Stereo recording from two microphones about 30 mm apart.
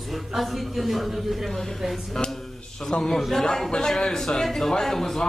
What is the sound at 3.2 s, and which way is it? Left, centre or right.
Speech, centre.